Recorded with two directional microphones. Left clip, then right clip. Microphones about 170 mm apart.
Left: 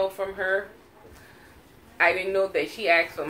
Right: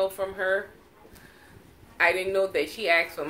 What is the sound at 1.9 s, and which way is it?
Speech, 50° right (ahead or behind).